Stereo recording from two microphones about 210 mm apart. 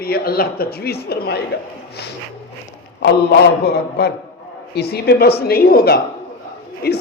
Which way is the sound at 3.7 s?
50° left (ahead or behind).